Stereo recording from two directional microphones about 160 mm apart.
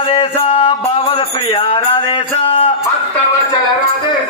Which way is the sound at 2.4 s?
35° left (ahead or behind).